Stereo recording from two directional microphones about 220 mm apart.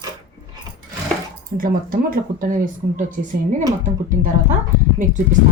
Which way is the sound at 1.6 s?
40° right (ahead or behind).